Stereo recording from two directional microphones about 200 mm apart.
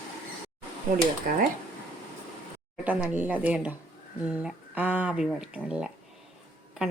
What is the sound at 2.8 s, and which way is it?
A woman's voice, 5° right (ahead or behind).